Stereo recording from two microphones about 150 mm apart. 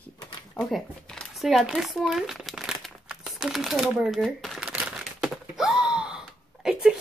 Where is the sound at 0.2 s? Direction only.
30° left (ahead or behind).